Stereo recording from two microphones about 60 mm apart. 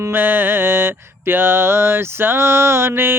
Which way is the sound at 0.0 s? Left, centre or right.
Right.